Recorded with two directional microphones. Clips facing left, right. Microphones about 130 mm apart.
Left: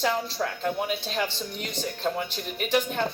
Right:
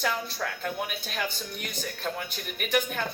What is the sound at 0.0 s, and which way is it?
A woman's voice, 25° left (ahead or behind).